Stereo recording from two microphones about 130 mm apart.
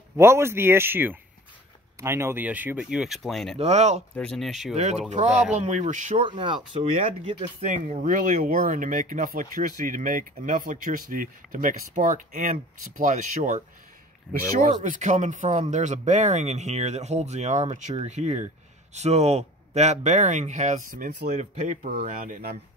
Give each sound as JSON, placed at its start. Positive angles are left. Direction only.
{"t": 0.2, "sound": "speech", "side_deg": -20}
{"t": 3.5, "sound": "speech", "side_deg": -55}
{"t": 4.2, "sound": "speech", "side_deg": 0}
{"t": 4.7, "sound": "speech", "side_deg": -60}
{"t": 6.1, "sound": "speech", "side_deg": -40}
{"t": 7.6, "sound": "speech", "side_deg": -70}
{"t": 14.6, "sound": "speech", "side_deg": -80}
{"t": 21.3, "sound": "speech", "side_deg": -70}